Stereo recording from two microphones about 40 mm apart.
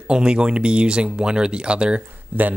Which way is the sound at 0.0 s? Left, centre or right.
Right.